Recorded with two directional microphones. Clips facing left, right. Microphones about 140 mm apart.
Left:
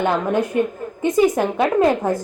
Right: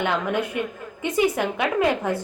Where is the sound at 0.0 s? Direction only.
40° left (ahead or behind).